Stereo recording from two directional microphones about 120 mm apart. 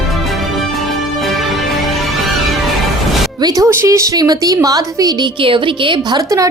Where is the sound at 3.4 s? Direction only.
30° right (ahead or behind).